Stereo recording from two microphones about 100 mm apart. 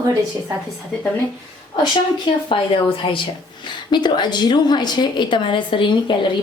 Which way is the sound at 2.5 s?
55° left (ahead or behind).